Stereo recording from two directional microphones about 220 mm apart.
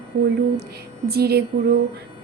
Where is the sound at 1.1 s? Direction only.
45° right (ahead or behind).